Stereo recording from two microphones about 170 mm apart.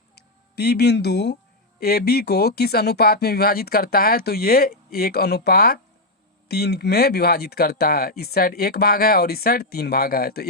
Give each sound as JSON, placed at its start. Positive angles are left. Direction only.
{"t": 0.2, "sound": "speech", "side_deg": 70}
{"t": 1.8, "sound": "speech", "side_deg": 65}